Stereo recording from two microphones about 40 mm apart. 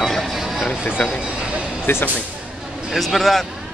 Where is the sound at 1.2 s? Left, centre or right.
Right.